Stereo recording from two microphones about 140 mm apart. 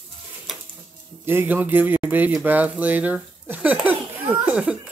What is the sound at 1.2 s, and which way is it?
Speech, 15° right (ahead or behind).